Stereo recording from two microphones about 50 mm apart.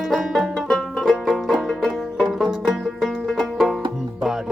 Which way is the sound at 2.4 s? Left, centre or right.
Centre.